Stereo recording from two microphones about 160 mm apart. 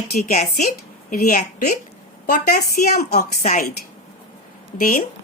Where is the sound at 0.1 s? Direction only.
50° left (ahead or behind).